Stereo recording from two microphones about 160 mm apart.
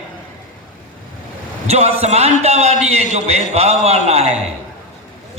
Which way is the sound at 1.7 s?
40° right (ahead or behind).